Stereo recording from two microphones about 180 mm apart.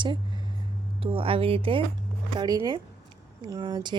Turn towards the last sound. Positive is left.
turn(degrees=-25)  # may be behind; listen again after turning